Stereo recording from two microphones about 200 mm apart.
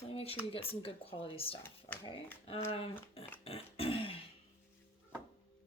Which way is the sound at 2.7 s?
30° left (ahead or behind).